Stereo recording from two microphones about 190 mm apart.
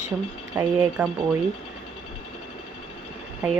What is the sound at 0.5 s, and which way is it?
Speech, 5° right (ahead or behind).